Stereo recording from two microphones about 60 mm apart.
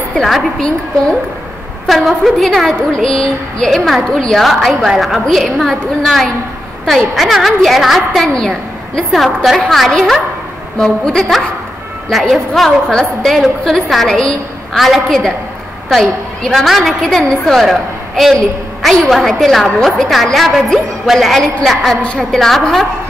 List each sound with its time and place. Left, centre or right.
0.6 s a woman's voice: centre
1.9 s a woman's voice: centre
5.2 s a woman's voice: centre
14.8 s a woman's voice: centre
22.0 s a woman's voice: centre
22.4 s a woman's voice: centre